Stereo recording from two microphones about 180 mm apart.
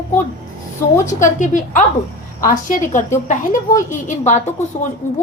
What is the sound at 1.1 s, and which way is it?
A woman's voice, 45° left (ahead or behind).